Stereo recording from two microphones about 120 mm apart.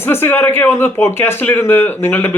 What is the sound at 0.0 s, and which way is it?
Speech, 20° left (ahead or behind).